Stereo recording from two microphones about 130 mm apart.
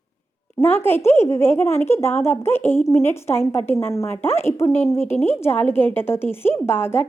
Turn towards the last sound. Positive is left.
turn(degrees=15)  # may be behind; listen again after turning